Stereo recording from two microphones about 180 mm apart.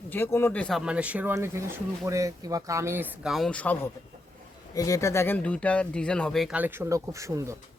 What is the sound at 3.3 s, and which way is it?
Speech, 5° left (ahead or behind).